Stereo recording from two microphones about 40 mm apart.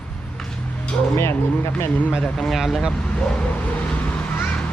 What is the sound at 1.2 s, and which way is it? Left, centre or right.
Speech, left.